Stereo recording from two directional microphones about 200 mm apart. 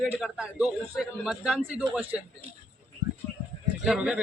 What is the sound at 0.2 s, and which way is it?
Speech, 5° right (ahead or behind).